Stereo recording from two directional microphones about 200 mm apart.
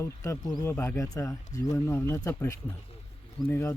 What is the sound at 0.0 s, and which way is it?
Speech, 15° left (ahead or behind).